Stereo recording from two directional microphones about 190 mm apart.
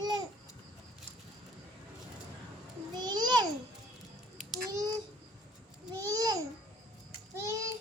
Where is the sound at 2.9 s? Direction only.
20° right (ahead or behind).